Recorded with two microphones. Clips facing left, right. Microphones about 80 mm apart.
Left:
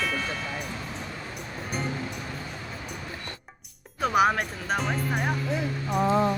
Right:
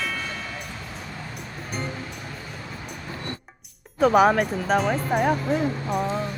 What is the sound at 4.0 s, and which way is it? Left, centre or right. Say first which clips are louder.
Speech: right 5 dB; centre.